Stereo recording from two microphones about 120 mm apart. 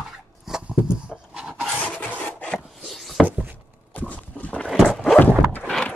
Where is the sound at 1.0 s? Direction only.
5° right (ahead or behind).